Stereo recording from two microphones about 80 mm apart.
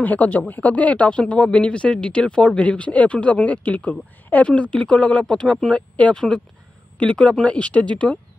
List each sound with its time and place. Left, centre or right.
0.0 s speech: centre